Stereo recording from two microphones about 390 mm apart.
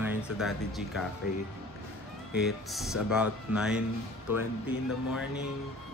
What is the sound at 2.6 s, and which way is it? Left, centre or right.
Speech, centre.